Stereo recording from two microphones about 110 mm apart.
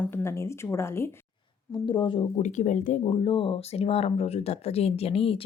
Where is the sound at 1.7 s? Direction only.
45° left (ahead or behind).